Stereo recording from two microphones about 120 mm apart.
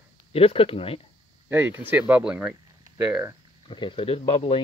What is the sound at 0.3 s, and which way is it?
Speech, 55° left (ahead or behind).